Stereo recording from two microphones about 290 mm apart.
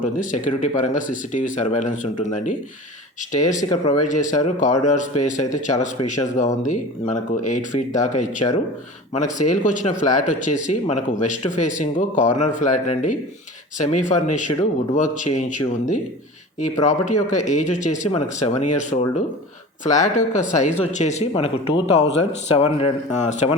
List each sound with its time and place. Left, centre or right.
0.0 s speech: left
3.6 s speech: centre
4.0 s speech: left